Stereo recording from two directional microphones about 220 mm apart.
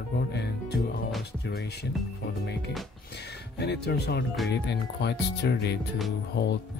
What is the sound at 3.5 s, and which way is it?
Speech, 50° left (ahead or behind).